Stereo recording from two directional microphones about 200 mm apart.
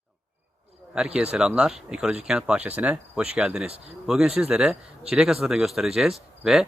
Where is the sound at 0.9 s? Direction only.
5° right (ahead or behind).